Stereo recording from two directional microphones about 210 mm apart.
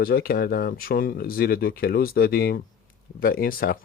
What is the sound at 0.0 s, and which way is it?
Speech, 45° left (ahead or behind).